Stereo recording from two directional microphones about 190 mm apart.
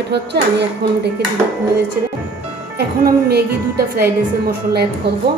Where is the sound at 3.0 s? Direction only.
55° right (ahead or behind).